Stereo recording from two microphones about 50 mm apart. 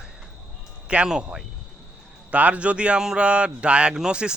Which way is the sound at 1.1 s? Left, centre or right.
Centre.